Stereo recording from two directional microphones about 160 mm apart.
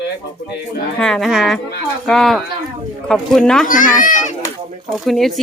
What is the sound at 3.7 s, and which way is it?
Speech, 55° left (ahead or behind).